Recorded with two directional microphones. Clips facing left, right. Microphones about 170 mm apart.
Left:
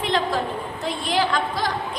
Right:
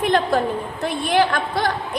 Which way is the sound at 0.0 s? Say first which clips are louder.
Right 4 dB; 55° right (ahead or behind).